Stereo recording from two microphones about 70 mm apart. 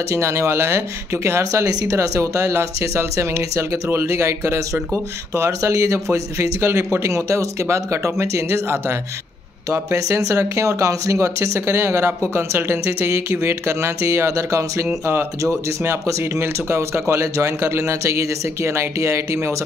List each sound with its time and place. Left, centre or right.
0.1 s speech: right
1.4 s speech: right
2.0 s speech: right
9.7 s speech: right